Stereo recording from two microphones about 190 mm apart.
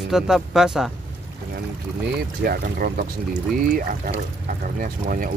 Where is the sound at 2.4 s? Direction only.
50° right (ahead or behind).